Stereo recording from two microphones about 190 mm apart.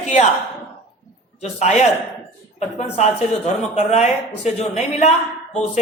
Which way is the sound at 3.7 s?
35° left (ahead or behind).